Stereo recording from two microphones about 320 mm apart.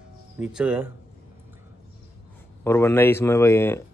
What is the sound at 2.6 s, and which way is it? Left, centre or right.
Speech, centre.